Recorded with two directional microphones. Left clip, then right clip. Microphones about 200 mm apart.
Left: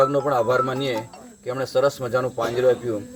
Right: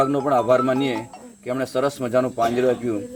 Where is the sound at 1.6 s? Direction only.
45° right (ahead or behind).